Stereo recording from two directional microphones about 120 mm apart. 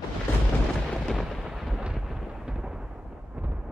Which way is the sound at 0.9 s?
Centre (ahead or behind).